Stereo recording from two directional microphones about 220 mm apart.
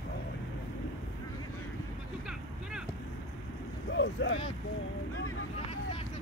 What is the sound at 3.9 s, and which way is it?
Speech, 55° left (ahead or behind).